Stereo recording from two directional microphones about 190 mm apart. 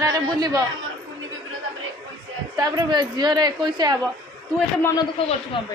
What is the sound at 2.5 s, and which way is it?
Speech, 20° right (ahead or behind).